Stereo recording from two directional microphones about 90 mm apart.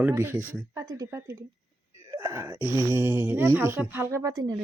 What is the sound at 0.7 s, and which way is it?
Speech, 40° right (ahead or behind).